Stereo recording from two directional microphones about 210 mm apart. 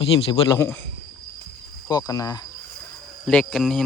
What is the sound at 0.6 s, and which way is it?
Speech, 10° left (ahead or behind).